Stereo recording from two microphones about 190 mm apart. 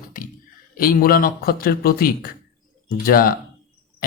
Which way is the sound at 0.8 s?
50° left (ahead or behind).